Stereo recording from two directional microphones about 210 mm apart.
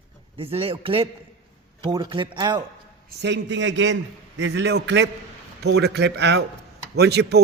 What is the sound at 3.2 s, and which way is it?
A man's voice, 60° right (ahead or behind).